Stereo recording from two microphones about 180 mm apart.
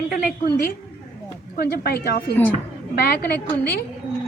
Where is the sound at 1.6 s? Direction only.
60° left (ahead or behind).